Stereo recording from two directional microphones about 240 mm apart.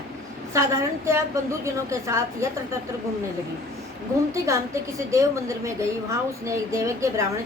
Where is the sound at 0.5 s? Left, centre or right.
Centre.